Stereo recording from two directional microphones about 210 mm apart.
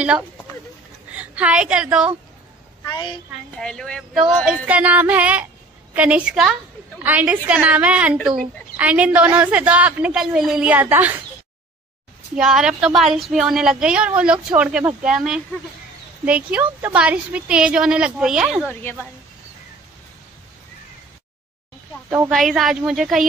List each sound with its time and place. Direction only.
1.1 s a woman's voice: 5° right (ahead or behind)
2.9 s a woman's voice: 20° left (ahead or behind)
3.5 s a woman's voice: 5° left (ahead or behind)
12.4 s a woman's voice: 5° right (ahead or behind)
18.7 s a woman's voice: 10° left (ahead or behind)
22.3 s a woman's voice: centre (ahead or behind)